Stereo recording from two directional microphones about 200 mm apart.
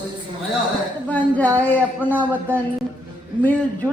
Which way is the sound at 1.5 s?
10° left (ahead or behind).